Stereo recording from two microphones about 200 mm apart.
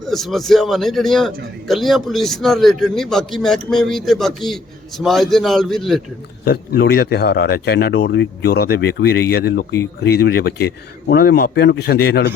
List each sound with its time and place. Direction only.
0.0 s a man's voice: centre (ahead or behind)
6.4 s speech: 50° left (ahead or behind)